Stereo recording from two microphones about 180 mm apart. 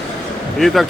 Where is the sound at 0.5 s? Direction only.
Centre (ahead or behind).